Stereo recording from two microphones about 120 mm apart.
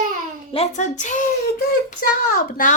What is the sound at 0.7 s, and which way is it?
Speech, 90° left.